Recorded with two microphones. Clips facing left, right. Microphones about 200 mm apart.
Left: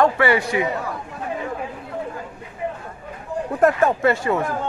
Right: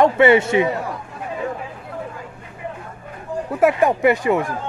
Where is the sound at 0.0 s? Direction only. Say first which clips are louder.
Right 4 dB; 20° right (ahead or behind).